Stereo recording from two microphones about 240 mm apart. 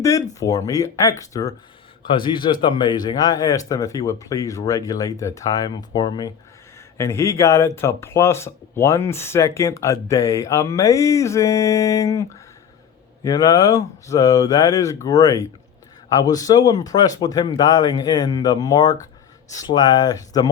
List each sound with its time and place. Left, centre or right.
0.0 s speech: centre